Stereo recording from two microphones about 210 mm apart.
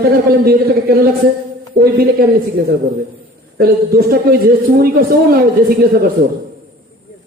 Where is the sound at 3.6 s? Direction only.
45° right (ahead or behind).